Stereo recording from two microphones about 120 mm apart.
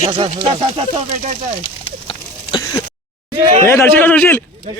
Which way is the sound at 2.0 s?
45° left (ahead or behind).